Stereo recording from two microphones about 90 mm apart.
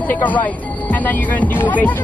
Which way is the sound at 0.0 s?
20° left (ahead or behind).